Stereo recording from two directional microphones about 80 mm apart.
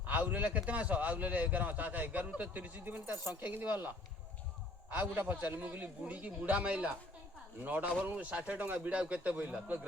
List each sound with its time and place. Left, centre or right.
0.0 s a man's voice: right